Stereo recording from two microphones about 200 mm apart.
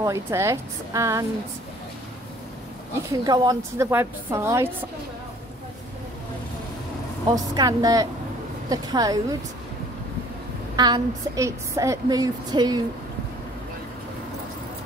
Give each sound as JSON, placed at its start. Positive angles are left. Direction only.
{"t": 0.0, "sound": "a woman's voice", "side_deg": -15}
{"t": 3.1, "sound": "a woman's voice", "side_deg": -20}
{"t": 7.2, "sound": "a woman's voice", "side_deg": -20}
{"t": 10.8, "sound": "a woman's voice", "side_deg": -15}